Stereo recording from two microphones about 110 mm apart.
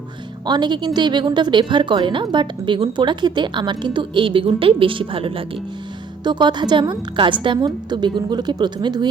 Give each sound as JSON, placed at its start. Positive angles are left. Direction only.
{"t": 0.4, "sound": "a woman's voice", "side_deg": -40}
{"t": 6.2, "sound": "a woman's voice", "side_deg": -40}